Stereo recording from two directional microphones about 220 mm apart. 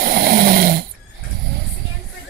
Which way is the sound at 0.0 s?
40° right (ahead or behind).